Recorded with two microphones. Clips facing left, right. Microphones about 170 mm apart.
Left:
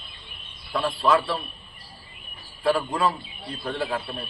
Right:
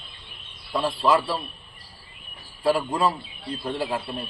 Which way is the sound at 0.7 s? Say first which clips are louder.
Even; 10° right (ahead or behind).